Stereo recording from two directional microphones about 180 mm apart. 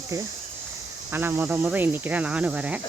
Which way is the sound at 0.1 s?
20° right (ahead or behind).